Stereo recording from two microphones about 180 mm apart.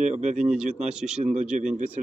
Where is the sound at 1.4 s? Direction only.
40° right (ahead or behind).